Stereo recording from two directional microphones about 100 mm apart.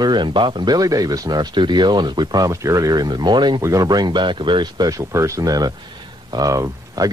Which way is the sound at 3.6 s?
30° right (ahead or behind).